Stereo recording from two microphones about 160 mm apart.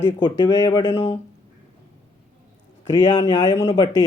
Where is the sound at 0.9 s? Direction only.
40° left (ahead or behind).